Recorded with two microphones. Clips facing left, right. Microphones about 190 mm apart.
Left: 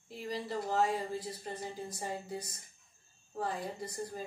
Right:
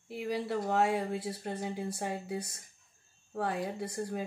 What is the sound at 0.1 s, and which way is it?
Speech, 65° right (ahead or behind).